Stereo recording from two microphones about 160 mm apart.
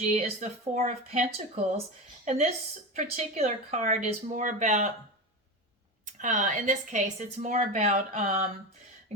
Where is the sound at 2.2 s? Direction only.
45° right (ahead or behind).